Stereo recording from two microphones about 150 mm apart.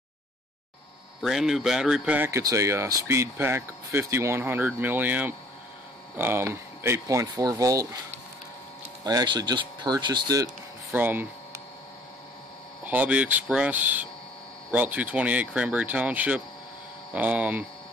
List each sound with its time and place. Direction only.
1.2 s speech: centre (ahead or behind); by 7.9 s 20° right (ahead or behind)
9.0 s speech: 25° right (ahead or behind)
10.9 s a sound: 10° right (ahead or behind)
12.8 s speech: 10° right (ahead or behind)